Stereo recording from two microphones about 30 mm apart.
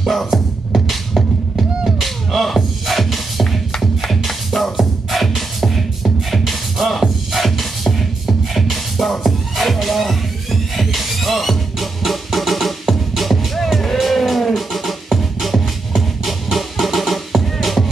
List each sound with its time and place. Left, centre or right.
0.1 s beatboxing: centre
4.1 s music: centre